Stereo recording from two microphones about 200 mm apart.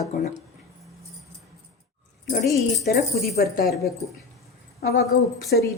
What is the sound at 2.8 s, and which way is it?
Speech, 55° left (ahead or behind).